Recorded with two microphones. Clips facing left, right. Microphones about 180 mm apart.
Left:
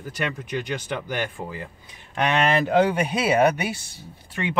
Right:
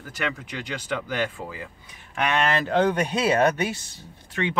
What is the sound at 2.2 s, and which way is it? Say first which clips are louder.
Speech: left 2 dB; 20° left (ahead or behind).